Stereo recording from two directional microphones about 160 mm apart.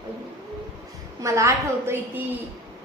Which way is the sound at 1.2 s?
20° right (ahead or behind).